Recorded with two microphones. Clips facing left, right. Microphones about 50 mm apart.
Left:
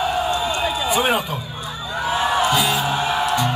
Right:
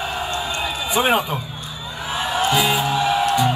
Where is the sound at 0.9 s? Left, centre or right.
Right.